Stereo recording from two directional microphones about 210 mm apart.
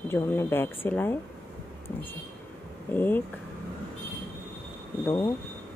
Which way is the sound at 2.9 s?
10° left (ahead or behind).